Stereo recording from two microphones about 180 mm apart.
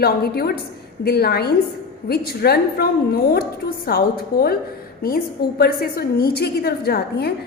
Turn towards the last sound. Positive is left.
turn(degrees=60)  # may be behind; listen again after turning